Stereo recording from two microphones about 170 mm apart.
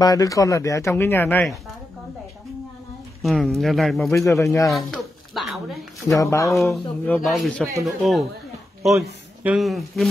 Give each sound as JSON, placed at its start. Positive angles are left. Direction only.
{"t": 0.0, "sound": "speech", "side_deg": 20}
{"t": 3.2, "sound": "speech", "side_deg": 0}
{"t": 4.1, "sound": "speech", "side_deg": 15}
{"t": 4.7, "sound": "a sound", "side_deg": 0}
{"t": 6.0, "sound": "speech", "side_deg": 15}
{"t": 6.5, "sound": "speech", "side_deg": 0}
{"t": 9.4, "sound": "speech", "side_deg": -5}